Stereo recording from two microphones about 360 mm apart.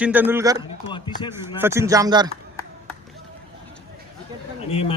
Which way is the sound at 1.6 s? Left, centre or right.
Centre.